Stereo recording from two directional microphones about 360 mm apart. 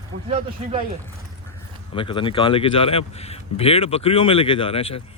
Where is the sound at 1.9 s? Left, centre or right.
Centre.